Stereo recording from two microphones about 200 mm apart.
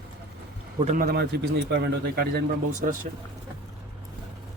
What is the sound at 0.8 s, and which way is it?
Speech, 40° right (ahead or behind).